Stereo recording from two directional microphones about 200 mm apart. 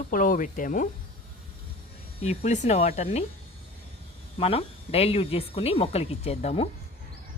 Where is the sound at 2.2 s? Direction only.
35° left (ahead or behind).